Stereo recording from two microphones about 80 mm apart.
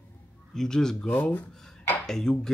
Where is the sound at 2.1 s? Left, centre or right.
Centre.